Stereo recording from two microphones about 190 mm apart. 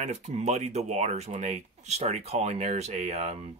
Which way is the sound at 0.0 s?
35° right (ahead or behind).